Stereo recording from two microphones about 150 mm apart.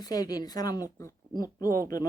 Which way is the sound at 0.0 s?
25° left (ahead or behind).